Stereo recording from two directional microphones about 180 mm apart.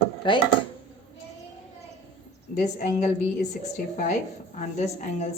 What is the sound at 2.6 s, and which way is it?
A woman's voice, 40° left (ahead or behind).